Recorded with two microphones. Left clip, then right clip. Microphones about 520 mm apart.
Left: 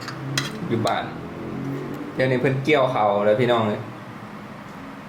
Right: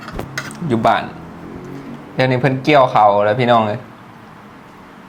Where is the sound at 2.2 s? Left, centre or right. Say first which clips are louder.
Right 5 dB; right.